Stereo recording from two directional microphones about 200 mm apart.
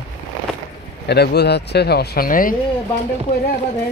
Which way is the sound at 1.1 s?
55° left (ahead or behind).